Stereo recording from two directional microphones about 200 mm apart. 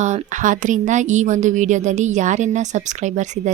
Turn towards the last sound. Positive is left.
turn(degrees=-35)  # may be behind; listen again after turning